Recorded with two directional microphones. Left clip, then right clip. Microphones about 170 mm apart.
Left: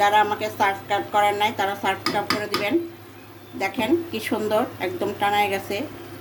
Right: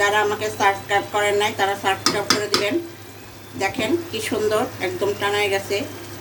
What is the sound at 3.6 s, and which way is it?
A woman's voice, 55° left (ahead or behind).